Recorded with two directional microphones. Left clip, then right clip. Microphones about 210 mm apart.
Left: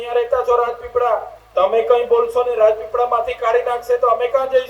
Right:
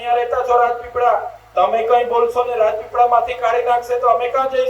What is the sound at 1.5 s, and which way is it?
Speech, 30° left (ahead or behind).